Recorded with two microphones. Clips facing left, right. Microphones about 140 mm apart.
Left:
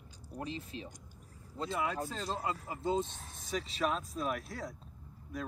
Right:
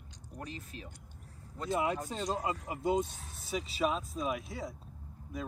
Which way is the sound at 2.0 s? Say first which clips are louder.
Right 2 dB; 15° right (ahead or behind).